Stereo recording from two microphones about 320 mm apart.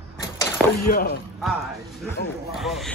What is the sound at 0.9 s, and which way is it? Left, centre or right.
Speech, left.